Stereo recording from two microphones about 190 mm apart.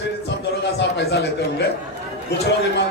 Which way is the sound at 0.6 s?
65° left (ahead or behind).